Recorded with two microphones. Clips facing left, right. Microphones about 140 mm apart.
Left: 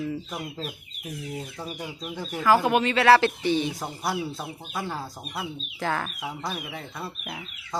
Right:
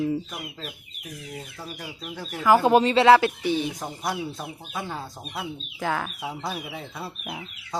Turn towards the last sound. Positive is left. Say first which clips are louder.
# right 1 dB
turn(degrees=-5)  # may be behind; listen again after turning